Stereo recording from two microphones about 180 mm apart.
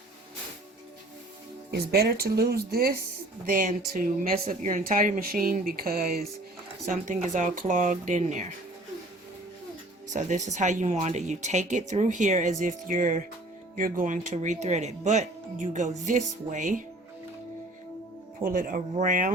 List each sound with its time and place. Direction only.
1.7 s speech: 60° right (ahead or behind)
6.9 s speech: 40° right (ahead or behind)
10.1 s speech: 40° right (ahead or behind)
18.4 s speech: 50° right (ahead or behind)